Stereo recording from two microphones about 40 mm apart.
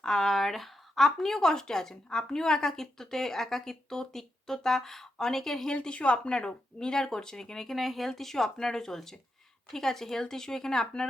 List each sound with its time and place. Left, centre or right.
0.0 s speech: centre
5.8 s speech: left; by 11.0 s centre